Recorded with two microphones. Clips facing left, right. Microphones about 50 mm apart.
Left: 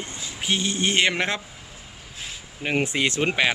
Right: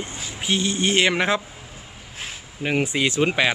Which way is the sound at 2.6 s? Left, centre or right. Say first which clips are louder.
Right 1 dB; centre.